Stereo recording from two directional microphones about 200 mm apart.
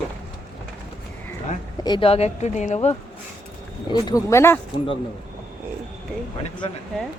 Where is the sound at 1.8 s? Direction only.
25° left (ahead or behind).